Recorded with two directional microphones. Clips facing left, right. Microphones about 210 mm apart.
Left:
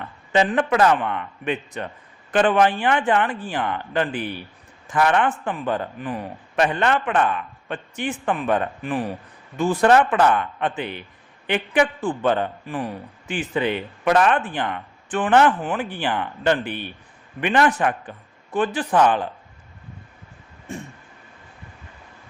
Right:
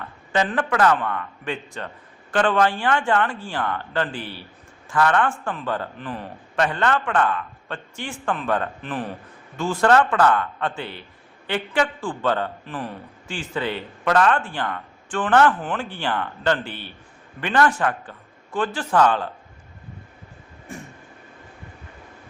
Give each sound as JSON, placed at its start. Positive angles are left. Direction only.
{"t": 0.3, "sound": "a man's voice", "side_deg": 20}